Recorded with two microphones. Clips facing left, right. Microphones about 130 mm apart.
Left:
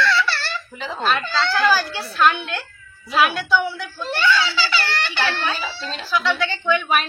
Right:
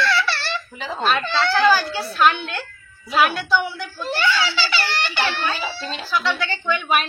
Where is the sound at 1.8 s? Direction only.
Centre (ahead or behind).